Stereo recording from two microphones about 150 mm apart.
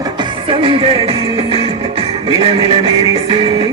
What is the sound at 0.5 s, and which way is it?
Music, 35° right (ahead or behind).